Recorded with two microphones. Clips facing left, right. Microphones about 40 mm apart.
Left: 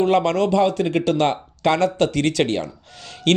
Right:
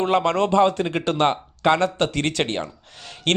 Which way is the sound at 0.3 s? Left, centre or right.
Right.